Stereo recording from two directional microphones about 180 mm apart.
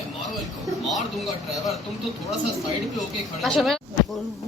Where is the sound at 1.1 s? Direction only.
Centre (ahead or behind).